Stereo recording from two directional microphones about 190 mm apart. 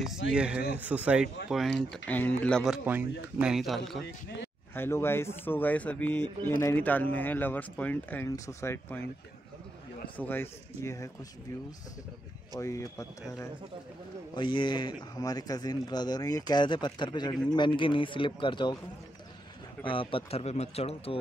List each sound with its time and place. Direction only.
0.3 s speech: 5° right (ahead or behind)
1.8 s speech: 10° left (ahead or behind)
4.7 s speech: 10° left (ahead or behind)
10.1 s speech: 10° left (ahead or behind)
12.5 s speech: 15° left (ahead or behind)
19.8 s speech: 25° left (ahead or behind)